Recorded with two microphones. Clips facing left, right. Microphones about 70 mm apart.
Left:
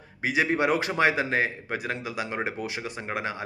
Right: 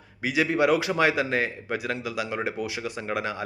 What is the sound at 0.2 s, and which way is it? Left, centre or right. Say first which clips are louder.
A man's voice: right 1 dB; left.